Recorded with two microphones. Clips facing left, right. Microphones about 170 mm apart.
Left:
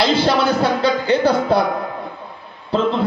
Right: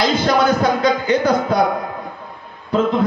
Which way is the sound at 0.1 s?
30° left (ahead or behind).